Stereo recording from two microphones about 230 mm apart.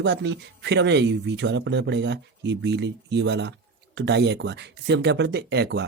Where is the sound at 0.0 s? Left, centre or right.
Right.